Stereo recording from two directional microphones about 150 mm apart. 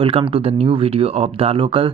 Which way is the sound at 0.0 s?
40° right (ahead or behind).